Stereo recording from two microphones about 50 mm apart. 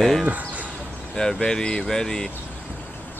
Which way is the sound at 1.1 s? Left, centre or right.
Centre.